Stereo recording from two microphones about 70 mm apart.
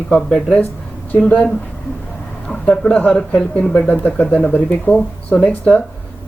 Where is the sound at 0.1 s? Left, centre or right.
Centre.